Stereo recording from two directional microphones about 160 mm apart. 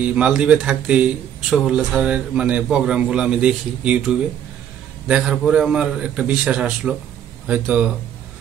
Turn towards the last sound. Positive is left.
turn(degrees=-10)  # may be behind; listen again after turning